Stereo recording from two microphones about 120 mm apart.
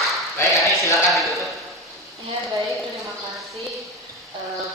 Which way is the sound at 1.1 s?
Centre (ahead or behind).